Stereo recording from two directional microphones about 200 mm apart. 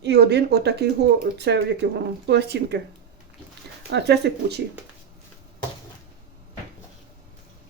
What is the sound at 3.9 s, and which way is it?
Speech, 55° right (ahead or behind).